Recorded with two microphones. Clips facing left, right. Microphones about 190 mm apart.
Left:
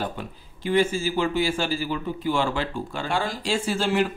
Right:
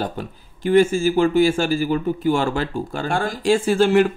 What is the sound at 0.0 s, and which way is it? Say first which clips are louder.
Speech: right 4 dB; 45° right (ahead or behind).